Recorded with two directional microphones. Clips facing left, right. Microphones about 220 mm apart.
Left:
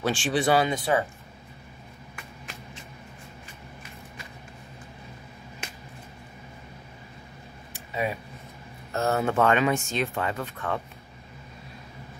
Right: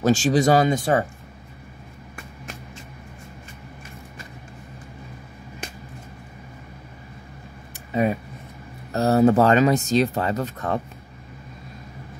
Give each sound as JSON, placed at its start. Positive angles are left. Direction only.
{"t": 0.0, "sound": "speech", "side_deg": -40}
{"t": 7.7, "sound": "a sound", "side_deg": -45}
{"t": 8.9, "sound": "speech", "side_deg": -35}